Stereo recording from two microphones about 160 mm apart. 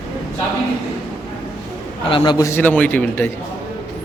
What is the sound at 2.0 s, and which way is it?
A man's voice, 30° left (ahead or behind).